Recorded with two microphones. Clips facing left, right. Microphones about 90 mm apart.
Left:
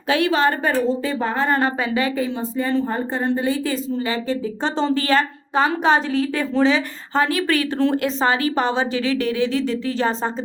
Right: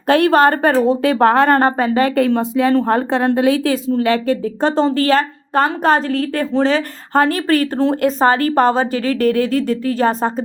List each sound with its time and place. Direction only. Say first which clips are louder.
0.1 s a woman's voice: right 6 dB; 55° right (ahead or behind)
2.1 s a woman's voice: right 8 dB; 70° right (ahead or behind); by 10.4 s 50° right (ahead or behind)